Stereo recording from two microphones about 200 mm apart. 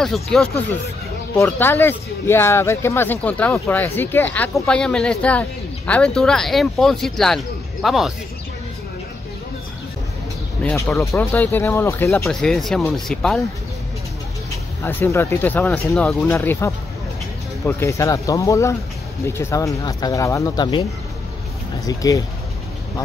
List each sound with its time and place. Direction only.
0.0 s speech: centre (ahead or behind)
10.6 s speech: 10° left (ahead or behind)
14.8 s speech: 10° left (ahead or behind)
21.8 s speech: 15° left (ahead or behind)